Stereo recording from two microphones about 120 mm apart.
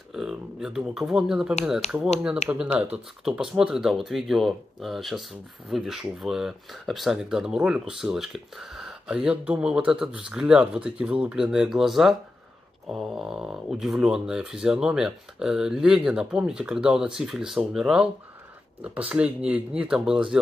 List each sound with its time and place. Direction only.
0.1 s speech: 5° right (ahead or behind)
1.8 s speech: 65° left (ahead or behind)
2.1 s speech: 5° right (ahead or behind)